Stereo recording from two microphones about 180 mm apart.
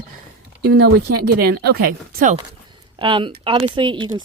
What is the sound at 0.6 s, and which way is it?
Speech, 60° right (ahead or behind).